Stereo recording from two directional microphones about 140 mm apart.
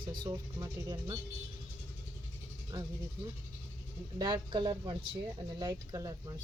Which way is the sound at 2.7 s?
30° right (ahead or behind).